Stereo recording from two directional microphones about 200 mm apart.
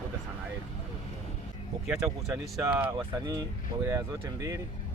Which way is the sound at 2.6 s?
10° right (ahead or behind).